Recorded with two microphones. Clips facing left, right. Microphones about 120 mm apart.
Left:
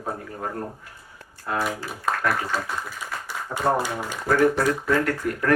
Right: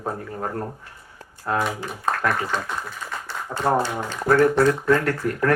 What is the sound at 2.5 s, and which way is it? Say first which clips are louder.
Speech: right 1 dB; 5° left (ahead or behind).